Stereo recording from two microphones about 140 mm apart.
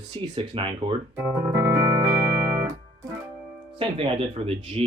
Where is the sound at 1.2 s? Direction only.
15° right (ahead or behind).